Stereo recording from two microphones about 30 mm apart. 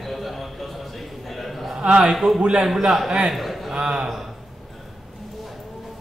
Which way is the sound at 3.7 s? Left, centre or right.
Right.